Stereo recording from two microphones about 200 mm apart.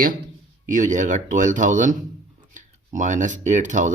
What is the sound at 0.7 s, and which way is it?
Speech, 40° right (ahead or behind).